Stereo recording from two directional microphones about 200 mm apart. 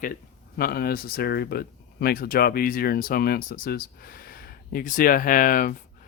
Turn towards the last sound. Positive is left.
turn(degrees=45)  # may be behind; listen again after turning